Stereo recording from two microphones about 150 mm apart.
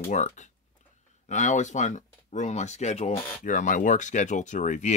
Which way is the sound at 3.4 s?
60° left (ahead or behind).